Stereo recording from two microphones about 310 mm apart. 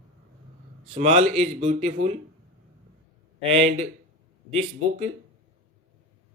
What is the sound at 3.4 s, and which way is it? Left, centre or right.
Speech, centre.